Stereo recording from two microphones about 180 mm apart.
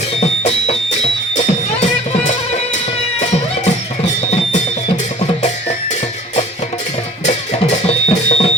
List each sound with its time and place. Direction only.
1.4 s music: 40° left (ahead or behind)
7.9 s music: 35° left (ahead or behind)